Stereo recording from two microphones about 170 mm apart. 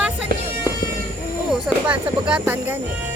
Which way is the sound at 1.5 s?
5° right (ahead or behind).